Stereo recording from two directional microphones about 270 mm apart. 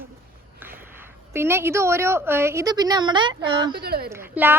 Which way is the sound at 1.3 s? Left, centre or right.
Centre.